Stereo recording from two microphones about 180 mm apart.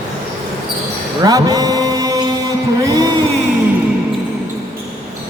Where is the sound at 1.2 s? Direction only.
20° right (ahead or behind).